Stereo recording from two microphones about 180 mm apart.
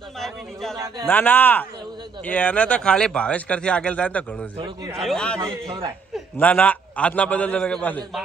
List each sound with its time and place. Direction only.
0.2 s a man's voice: centre (ahead or behind)